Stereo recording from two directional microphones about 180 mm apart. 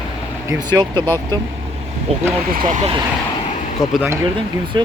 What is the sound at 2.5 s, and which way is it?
Speech, 50° right (ahead or behind).